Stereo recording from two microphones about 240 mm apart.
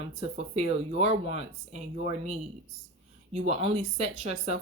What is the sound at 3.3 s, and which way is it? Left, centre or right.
Speech, right.